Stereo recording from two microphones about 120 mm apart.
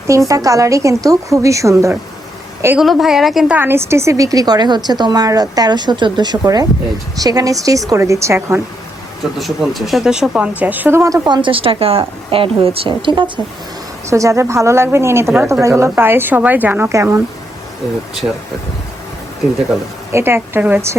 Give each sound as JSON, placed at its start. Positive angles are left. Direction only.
{"t": 0.1, "sound": "a woman's voice", "side_deg": -25}
{"t": 2.7, "sound": "a woman's voice", "side_deg": 0}
{"t": 3.5, "sound": "a woman's voice", "side_deg": -20}
{"t": 9.4, "sound": "speech", "side_deg": 0}
{"t": 11.4, "sound": "a woman's voice", "side_deg": -50}
{"t": 14.1, "sound": "a woman's voice", "side_deg": -25}
{"t": 18.2, "sound": "a woman's voice", "side_deg": -25}
{"t": 20.1, "sound": "a woman's voice", "side_deg": -20}